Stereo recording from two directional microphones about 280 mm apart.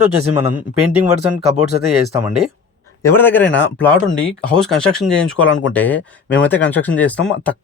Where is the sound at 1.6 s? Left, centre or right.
Right.